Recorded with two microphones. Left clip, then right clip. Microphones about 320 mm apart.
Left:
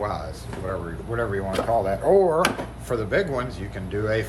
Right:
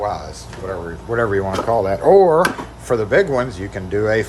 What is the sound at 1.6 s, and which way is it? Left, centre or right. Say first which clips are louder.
Speech: right 7 dB; right.